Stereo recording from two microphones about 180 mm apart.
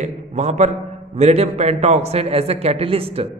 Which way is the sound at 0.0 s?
40° right (ahead or behind).